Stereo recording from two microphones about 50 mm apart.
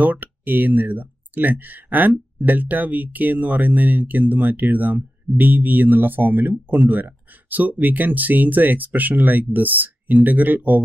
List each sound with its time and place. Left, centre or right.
0.0 s speech: right